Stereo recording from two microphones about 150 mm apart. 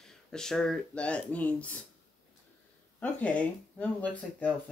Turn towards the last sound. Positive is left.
turn(degrees=10)  # may be behind; listen again after turning